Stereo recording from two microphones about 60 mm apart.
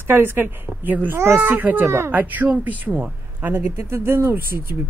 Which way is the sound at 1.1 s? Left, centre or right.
Right.